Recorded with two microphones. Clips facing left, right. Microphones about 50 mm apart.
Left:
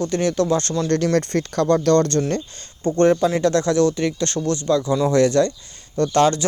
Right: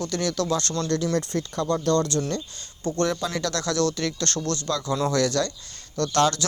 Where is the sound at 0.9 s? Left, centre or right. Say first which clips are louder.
Left 6 dB; left.